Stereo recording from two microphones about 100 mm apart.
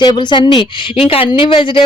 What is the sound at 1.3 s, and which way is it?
Speech, 55° left (ahead or behind).